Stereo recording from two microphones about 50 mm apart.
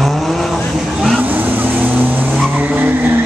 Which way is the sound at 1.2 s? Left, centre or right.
Right.